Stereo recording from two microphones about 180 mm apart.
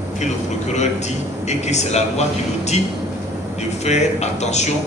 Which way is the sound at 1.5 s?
40° left (ahead or behind).